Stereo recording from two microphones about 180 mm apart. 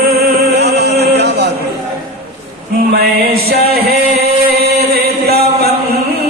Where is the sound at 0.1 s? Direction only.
65° right (ahead or behind).